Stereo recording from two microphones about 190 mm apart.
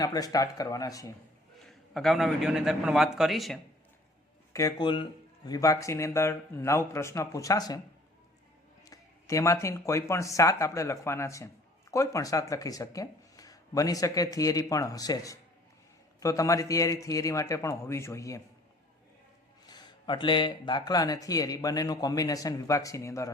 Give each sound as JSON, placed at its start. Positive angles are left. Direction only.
{"t": 0.0, "sound": "speech", "side_deg": 20}
{"t": 1.6, "sound": "a man's voice", "side_deg": 0}
{"t": 4.5, "sound": "speech", "side_deg": 20}
{"t": 8.8, "sound": "speech", "side_deg": 15}
{"t": 19.6, "sound": "speech", "side_deg": 20}